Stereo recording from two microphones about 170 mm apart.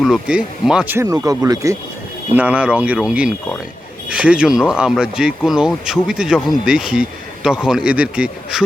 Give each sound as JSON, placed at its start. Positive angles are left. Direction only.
{"t": 0.0, "sound": "speech", "side_deg": -5}
{"t": 0.9, "sound": "speech", "side_deg": -20}
{"t": 2.3, "sound": "speech", "side_deg": -10}